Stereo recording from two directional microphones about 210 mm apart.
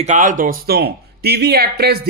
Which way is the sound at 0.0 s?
35° right (ahead or behind).